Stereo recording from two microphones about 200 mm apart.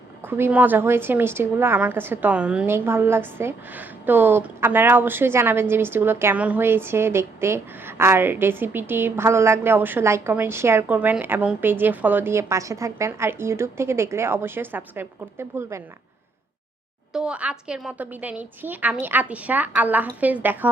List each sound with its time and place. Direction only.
0.3 s a woman's voice: 10° right (ahead or behind)
17.1 s a woman's voice: 5° right (ahead or behind)